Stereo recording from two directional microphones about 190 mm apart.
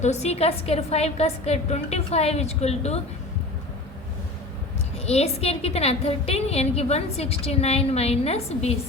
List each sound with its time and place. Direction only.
0.0 s a woman's voice: 35° left (ahead or behind)
5.0 s a woman's voice: 35° left (ahead or behind)